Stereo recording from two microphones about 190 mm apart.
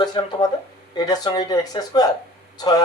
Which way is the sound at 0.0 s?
20° left (ahead or behind).